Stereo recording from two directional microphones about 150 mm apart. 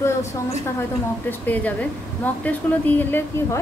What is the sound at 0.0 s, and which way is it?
A woman's voice, 20° left (ahead or behind).